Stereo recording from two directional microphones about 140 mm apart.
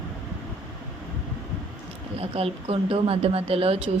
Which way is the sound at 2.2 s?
45° right (ahead or behind).